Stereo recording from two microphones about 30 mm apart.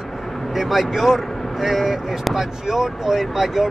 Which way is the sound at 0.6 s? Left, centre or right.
Centre.